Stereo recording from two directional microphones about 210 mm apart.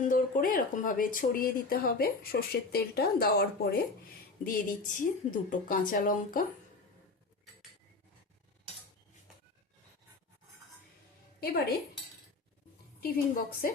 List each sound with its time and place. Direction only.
0.1 s speech: 40° left (ahead or behind)
4.4 s a woman's voice: 40° left (ahead or behind)
11.3 s a woman's voice: 50° left (ahead or behind)
13.0 s a woman's voice: 40° left (ahead or behind)